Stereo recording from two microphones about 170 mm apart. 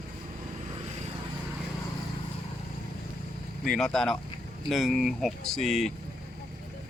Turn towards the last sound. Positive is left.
turn(degrees=0)  # may be behind; listen again after turning